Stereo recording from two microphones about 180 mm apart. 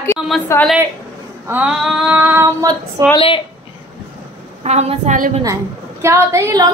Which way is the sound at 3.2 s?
30° left (ahead or behind).